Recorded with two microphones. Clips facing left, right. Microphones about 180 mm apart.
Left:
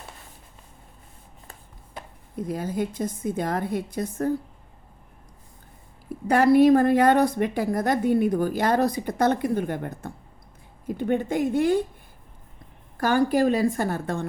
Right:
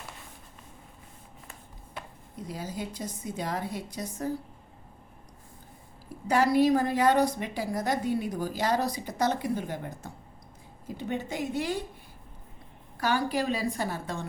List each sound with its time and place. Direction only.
2.5 s a woman's voice: 55° left (ahead or behind)
6.2 s a woman's voice: 55° left (ahead or behind)
13.0 s a woman's voice: 50° left (ahead or behind)